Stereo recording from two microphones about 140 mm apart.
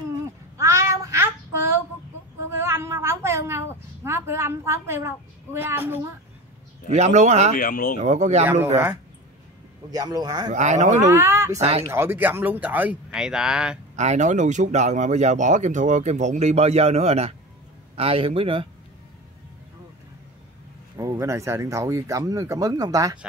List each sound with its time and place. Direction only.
0.6 s child singing: 20° right (ahead or behind)
2.5 s a sound: 20° right (ahead or behind)
6.9 s speech: 55° right (ahead or behind)
7.5 s speech: 85° left
8.0 s speech: 55° right (ahead or behind)
9.8 s speech: 25° right (ahead or behind)
10.5 s speech: 60° right (ahead or behind)
11.1 s speech: 20° right (ahead or behind)
13.9 s a man's voice: 55° right (ahead or behind); by 18.7 s 40° right (ahead or behind)
21.0 s speech: 25° right (ahead or behind)